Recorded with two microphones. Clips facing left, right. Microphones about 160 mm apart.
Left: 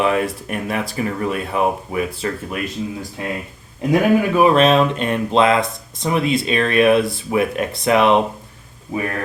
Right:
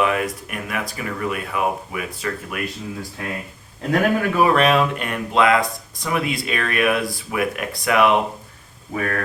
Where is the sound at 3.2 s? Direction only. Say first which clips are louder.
Left 5 dB; 20° left (ahead or behind).